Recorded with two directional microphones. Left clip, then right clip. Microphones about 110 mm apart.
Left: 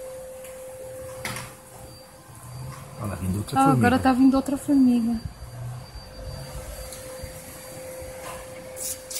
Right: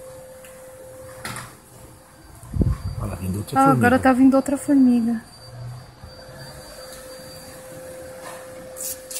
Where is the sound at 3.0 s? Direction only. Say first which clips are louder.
Right 1 dB; 10° right (ahead or behind).